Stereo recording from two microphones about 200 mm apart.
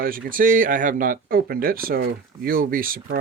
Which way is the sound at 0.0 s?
45° right (ahead or behind).